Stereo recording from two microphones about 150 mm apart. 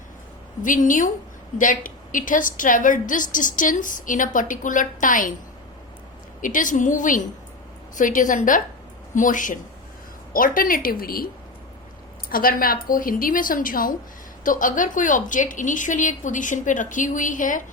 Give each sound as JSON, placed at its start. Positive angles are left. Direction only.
{"t": 0.6, "sound": "a woman's voice", "side_deg": 60}
{"t": 6.4, "sound": "a woman's voice", "side_deg": 60}
{"t": 12.3, "sound": "a woman's voice", "side_deg": 70}